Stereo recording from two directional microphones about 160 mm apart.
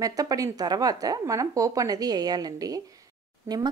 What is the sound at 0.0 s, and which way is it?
A woman's voice, 20° right (ahead or behind).